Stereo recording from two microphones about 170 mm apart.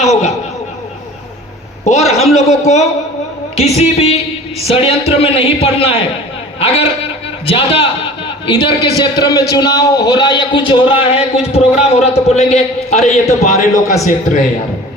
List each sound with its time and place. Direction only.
0.0 s a man's voice: 40° left (ahead or behind)
1.8 s a man's voice: 40° left (ahead or behind)
7.4 s a man's voice: 35° left (ahead or behind)